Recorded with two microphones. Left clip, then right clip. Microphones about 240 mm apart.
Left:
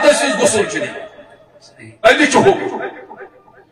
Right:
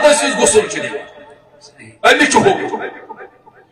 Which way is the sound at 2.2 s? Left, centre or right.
Right.